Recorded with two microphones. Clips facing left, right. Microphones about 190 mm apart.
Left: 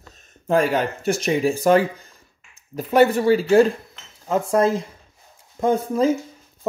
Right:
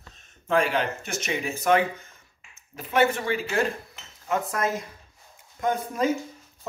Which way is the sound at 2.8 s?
40° left (ahead or behind).